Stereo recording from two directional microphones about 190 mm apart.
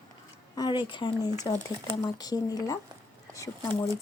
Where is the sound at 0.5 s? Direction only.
20° left (ahead or behind).